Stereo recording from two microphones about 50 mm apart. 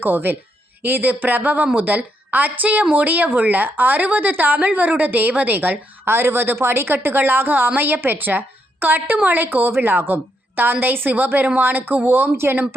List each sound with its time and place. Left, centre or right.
0.0 s a woman's voice: right
6.1 s a woman's voice: right